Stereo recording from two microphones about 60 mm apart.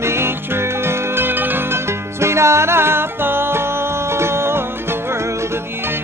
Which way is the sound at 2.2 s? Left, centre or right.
Right.